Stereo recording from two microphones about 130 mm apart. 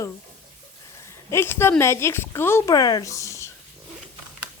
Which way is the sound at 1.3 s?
20° left (ahead or behind).